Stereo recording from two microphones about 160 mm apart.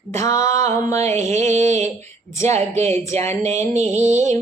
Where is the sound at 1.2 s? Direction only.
45° right (ahead or behind).